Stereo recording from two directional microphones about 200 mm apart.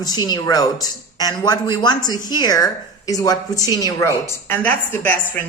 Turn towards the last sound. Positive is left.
turn(degrees=10)  # may be behind; listen again after turning